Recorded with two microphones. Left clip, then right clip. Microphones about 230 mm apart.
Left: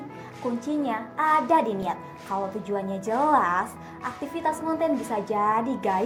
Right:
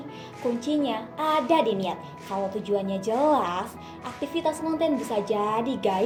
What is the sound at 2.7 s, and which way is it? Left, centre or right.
Speech, left.